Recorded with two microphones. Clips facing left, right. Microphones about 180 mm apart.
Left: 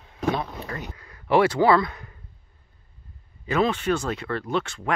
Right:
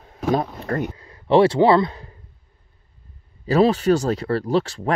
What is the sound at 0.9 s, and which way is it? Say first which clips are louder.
Speech: right 3 dB; 25° right (ahead or behind).